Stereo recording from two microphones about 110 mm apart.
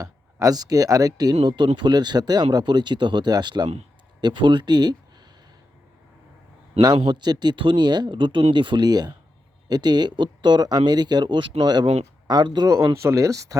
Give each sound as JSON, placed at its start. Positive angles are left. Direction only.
{"t": 0.0, "sound": "speech", "side_deg": -30}
{"t": 7.0, "sound": "speech", "side_deg": -40}
{"t": 12.7, "sound": "speech", "side_deg": -25}